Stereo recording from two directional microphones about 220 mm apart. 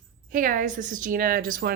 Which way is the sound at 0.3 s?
40° right (ahead or behind).